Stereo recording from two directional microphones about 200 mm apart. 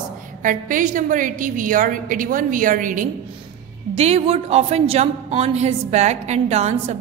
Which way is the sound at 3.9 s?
30° right (ahead or behind).